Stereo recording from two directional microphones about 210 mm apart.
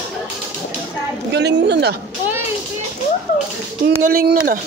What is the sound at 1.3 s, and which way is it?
Speech, 55° right (ahead or behind).